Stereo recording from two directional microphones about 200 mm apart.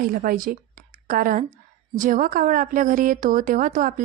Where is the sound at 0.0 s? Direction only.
45° right (ahead or behind).